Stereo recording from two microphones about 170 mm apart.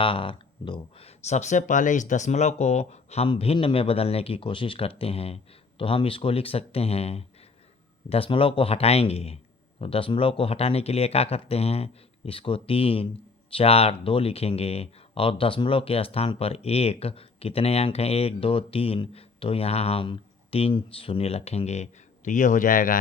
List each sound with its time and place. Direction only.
0.0 s speech: 30° left (ahead or behind); by 23.0 s 55° left (ahead or behind)